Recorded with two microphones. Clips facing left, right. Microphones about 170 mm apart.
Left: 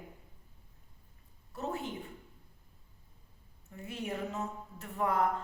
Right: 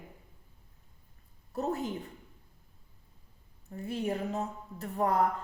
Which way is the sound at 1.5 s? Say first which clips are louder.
Right 5 dB; 40° right (ahead or behind).